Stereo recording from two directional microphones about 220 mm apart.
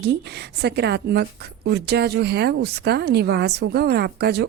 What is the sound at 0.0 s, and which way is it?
A woman's voice, 50° right (ahead or behind).